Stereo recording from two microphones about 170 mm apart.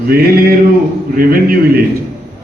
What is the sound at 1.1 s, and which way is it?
Speech, 60° right (ahead or behind).